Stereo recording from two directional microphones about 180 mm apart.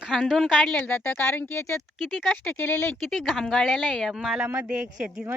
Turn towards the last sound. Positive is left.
turn(degrees=-5)  # may be behind; listen again after turning